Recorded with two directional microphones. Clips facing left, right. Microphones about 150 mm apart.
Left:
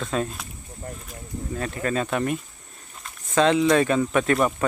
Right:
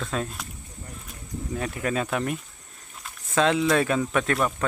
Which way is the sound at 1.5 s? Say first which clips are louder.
Left 1 dB; 5° right (ahead or behind).